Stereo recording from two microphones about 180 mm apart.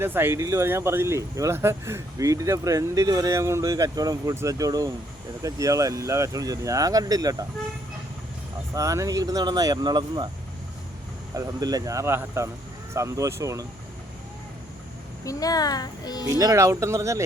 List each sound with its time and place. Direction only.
0.0 s speech: 10° right (ahead or behind)
8.7 s speech: 20° right (ahead or behind)
11.3 s speech: 20° right (ahead or behind)
15.2 s speech: 20° left (ahead or behind)
16.2 s speech: 20° right (ahead or behind)